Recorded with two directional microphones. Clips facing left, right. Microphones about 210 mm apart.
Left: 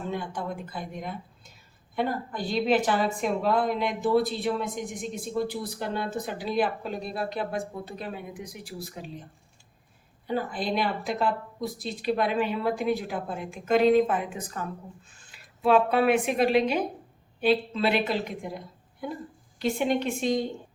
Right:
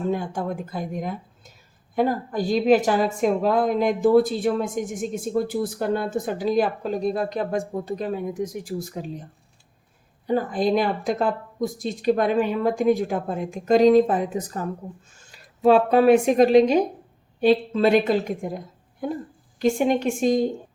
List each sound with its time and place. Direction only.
0.1 s a woman's voice: 45° right (ahead or behind)
10.2 s a woman's voice: 45° right (ahead or behind)